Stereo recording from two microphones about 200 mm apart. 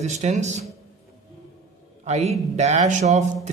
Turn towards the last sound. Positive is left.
turn(degrees=-35)  # may be behind; listen again after turning